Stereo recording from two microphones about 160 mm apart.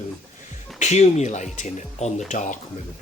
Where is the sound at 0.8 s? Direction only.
45° left (ahead or behind).